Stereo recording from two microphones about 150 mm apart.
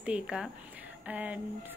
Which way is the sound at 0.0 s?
5° right (ahead or behind).